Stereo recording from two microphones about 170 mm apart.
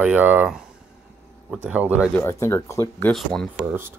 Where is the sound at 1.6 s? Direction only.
10° right (ahead or behind).